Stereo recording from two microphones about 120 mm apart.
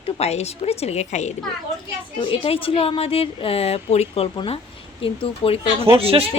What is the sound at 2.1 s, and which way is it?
Speech, 45° left (ahead or behind).